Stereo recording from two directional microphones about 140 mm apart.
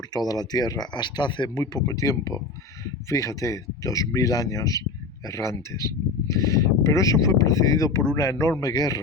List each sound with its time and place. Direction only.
0.1 s speech: 30° left (ahead or behind)